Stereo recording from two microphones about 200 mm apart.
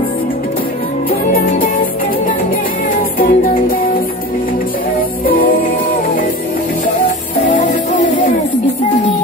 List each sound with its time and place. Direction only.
1.3 s music: 45° left (ahead or behind)
3.2 s music: 45° left (ahead or behind)
5.2 s music: 45° left (ahead or behind)
7.4 s music: 40° left (ahead or behind)